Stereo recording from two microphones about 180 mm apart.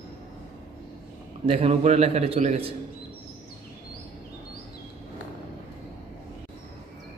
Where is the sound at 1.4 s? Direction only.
35° right (ahead or behind).